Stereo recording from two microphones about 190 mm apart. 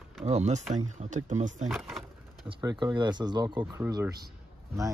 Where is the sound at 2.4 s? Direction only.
25° right (ahead or behind).